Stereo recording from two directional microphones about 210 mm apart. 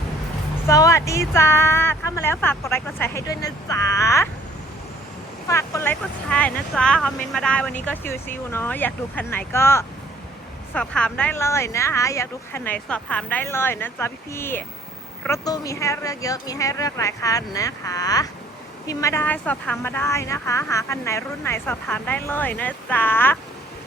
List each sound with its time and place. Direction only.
0.7 s speech: 15° left (ahead or behind)
5.5 s speech: 15° left (ahead or behind)